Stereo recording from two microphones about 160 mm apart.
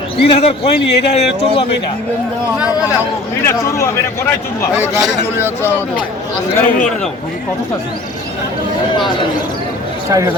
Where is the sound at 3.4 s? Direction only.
15° left (ahead or behind).